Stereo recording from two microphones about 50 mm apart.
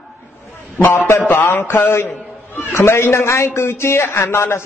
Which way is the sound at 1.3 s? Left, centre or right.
Left.